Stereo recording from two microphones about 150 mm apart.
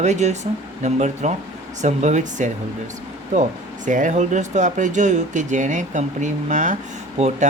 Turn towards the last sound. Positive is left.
turn(degrees=-45)  # may be behind; listen again after turning